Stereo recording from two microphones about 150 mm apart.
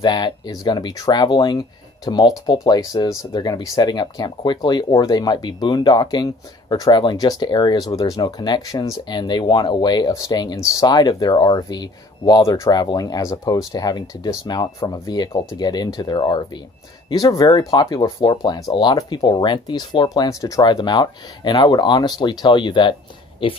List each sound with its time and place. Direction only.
0.0 s speech: 30° left (ahead or behind)